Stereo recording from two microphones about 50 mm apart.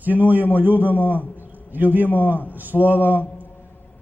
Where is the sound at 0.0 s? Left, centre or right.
Right.